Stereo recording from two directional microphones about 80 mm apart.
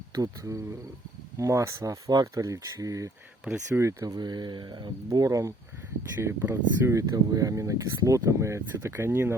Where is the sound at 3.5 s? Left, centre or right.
Centre.